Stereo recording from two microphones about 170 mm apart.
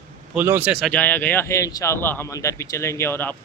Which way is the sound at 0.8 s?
10° left (ahead or behind).